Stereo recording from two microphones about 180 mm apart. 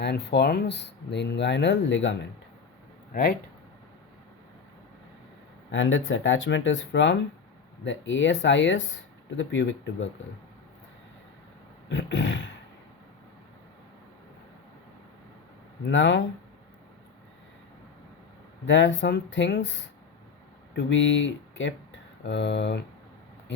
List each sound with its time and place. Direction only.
0.0 s speech: 70° left (ahead or behind); by 2.1 s 90° left
3.1 s speech: 55° left (ahead or behind)
5.7 s speech: 90° left
11.9 s a sound: 90° left
15.9 s speech: 90° left
18.6 s speech: 90° left